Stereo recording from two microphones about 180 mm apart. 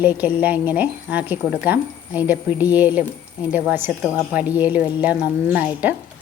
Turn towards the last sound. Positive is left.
turn(degrees=-10)  # may be behind; listen again after turning